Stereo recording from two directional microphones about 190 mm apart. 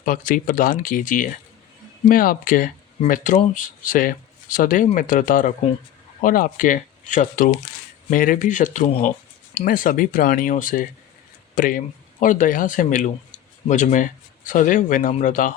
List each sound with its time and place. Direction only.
0.0 s speech: 45° left (ahead or behind)